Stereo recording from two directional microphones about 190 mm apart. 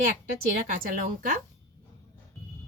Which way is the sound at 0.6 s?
45° right (ahead or behind).